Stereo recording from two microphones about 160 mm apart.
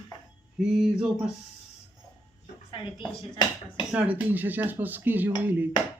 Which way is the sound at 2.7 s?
30° left (ahead or behind).